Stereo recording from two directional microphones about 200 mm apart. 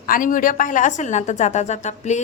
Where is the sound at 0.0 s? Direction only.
40° left (ahead or behind).